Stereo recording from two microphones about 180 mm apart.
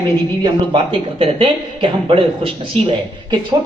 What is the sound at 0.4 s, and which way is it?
Speech, 30° right (ahead or behind).